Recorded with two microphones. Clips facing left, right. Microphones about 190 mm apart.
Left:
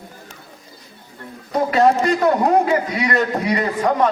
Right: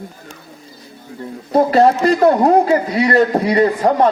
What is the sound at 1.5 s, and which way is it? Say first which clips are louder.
A man's voice: right 4 dB; 35° right (ahead or behind).